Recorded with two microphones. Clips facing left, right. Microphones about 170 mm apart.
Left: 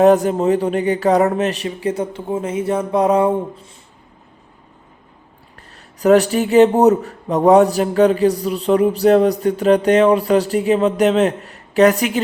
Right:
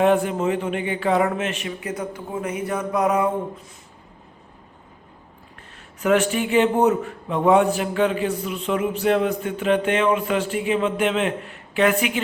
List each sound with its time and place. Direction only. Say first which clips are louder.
0.0 s a man's voice: left 6 dB; 40° left (ahead or behind)
6.0 s a man's voice: left 7 dB; 35° left (ahead or behind)